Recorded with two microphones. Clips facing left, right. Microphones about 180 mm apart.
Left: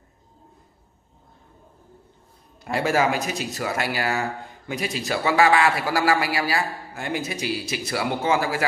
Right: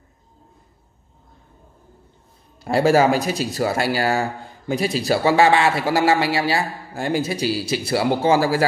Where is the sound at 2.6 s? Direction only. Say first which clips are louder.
Right 6 dB; 30° right (ahead or behind).